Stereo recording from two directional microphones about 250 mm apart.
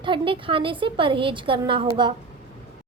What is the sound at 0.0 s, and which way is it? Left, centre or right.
Speech, centre.